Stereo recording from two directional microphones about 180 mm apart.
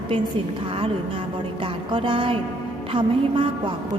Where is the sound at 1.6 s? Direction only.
30° right (ahead or behind).